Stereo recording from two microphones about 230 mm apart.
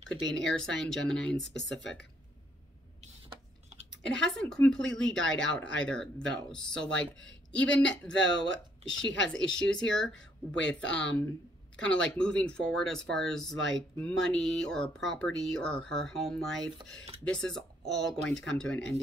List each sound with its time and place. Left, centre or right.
0.0 s speech: centre
1.3 s speech: left
3.0 s a sound: right
4.0 s speech: centre
8.1 s speech: left
9.3 s speech: centre
16.7 s speech: right
17.2 s speech: centre